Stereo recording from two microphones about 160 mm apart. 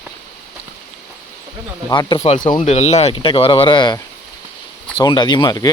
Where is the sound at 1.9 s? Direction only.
25° left (ahead or behind).